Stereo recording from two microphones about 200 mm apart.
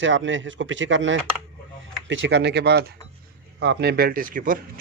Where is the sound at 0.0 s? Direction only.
70° right (ahead or behind).